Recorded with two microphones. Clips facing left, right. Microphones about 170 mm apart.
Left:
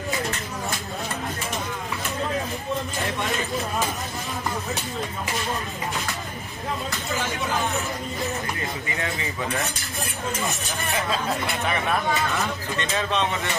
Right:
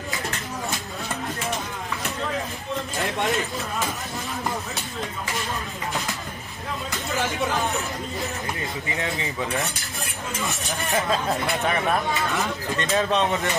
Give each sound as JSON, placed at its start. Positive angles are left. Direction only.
{"t": 8.9, "sound": "speech", "side_deg": -20}
{"t": 12.9, "sound": "speech", "side_deg": -40}